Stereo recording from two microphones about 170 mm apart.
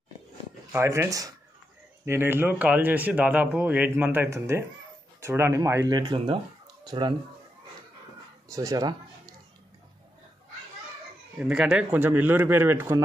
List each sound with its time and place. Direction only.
0.7 s speech: 15° right (ahead or behind)
8.5 s speech: 20° right (ahead or behind)
11.3 s speech: 5° right (ahead or behind)